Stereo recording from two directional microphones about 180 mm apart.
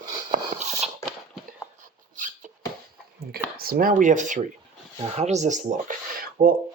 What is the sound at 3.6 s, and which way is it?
Speech, 55° right (ahead or behind).